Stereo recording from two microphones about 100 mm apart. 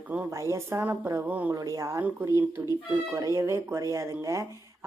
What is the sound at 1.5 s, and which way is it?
Speech, 35° right (ahead or behind).